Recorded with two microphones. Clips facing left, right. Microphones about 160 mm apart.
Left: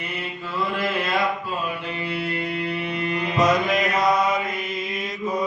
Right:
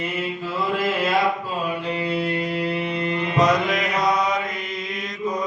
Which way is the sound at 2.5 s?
30° right (ahead or behind).